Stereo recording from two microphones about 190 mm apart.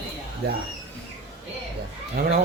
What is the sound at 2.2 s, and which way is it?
Speech, 50° right (ahead or behind).